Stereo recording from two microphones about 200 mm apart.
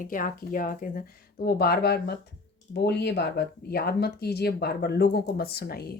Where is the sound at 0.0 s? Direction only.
40° left (ahead or behind).